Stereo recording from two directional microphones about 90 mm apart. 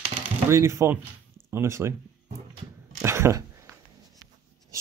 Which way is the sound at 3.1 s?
30° right (ahead or behind).